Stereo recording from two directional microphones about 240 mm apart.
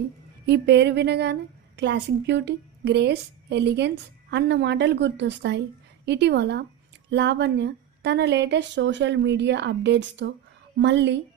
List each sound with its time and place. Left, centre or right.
0.4 s a woman's voice: right